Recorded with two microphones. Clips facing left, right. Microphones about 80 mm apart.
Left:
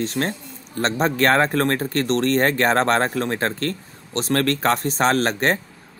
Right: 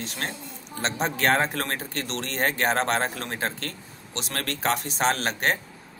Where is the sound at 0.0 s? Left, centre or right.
Left.